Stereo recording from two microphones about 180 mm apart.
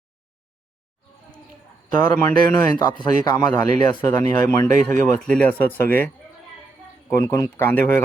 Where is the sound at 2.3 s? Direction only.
20° left (ahead or behind).